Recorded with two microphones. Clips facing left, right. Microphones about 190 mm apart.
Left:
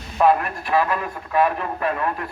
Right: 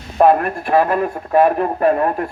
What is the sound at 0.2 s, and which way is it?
Speech, 50° right (ahead or behind).